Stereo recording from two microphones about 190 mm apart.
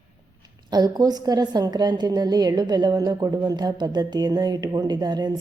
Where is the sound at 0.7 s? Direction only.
20° right (ahead or behind).